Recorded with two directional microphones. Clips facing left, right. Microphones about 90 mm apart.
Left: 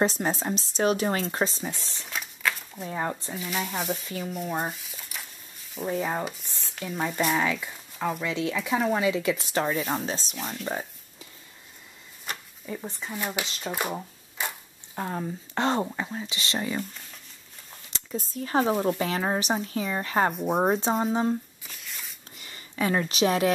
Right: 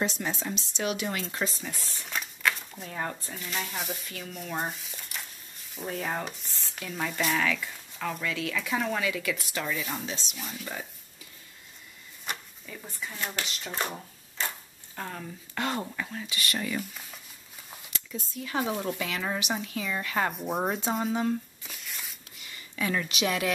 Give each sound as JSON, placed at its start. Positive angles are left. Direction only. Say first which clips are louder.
{"t": 0.0, "sound": "speech", "louder": "left 5 dB", "side_deg": 40}
{"t": 2.0, "sound": "a sound", "louder": "even", "side_deg": 0}
{"t": 2.9, "sound": "speech", "louder": "left 4 dB", "side_deg": 20}
{"t": 3.3, "sound": "speech", "louder": "left 4 dB", "side_deg": 5}
{"t": 4.6, "sound": "a sound", "louder": "left 2 dB", "side_deg": 0}
{"t": 5.9, "sound": "rub", "louder": "left 4 dB", "side_deg": 10}
{"t": 7.3, "sound": "speech", "louder": "left 2 dB", "side_deg": 20}
{"t": 12.6, "sound": "speech", "louder": "left 5 dB", "side_deg": 25}
{"t": 13.5, "sound": "rub", "louder": "left 3 dB", "side_deg": 15}
{"t": 14.4, "sound": "a sound", "louder": "left 1 dB", "side_deg": 10}
{"t": 15.0, "sound": "speech", "louder": "left 7 dB", "side_deg": 30}
{"t": 17.9, "sound": "speech", "louder": "left 5 dB", "side_deg": 35}
{"t": 21.6, "sound": "shuffling cards", "louder": "even", "side_deg": 0}
{"t": 22.4, "sound": "speech", "louder": "left 4 dB", "side_deg": 35}